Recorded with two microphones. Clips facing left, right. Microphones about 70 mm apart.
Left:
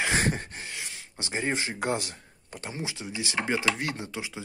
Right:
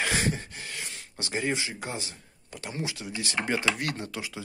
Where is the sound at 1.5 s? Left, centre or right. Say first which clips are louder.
Left 3 dB; left.